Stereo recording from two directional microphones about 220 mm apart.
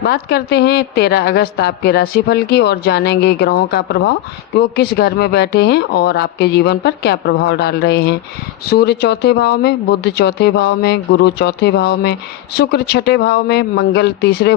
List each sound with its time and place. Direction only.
0.0 s a woman's voice: 45° left (ahead or behind)